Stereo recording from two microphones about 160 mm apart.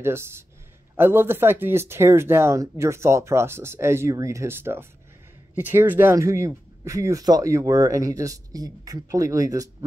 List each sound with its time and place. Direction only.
0.0 s speech: 15° right (ahead or behind)